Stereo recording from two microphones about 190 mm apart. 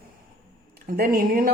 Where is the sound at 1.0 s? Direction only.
50° right (ahead or behind).